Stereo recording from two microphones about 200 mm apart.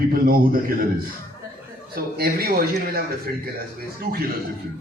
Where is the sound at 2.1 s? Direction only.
50° right (ahead or behind).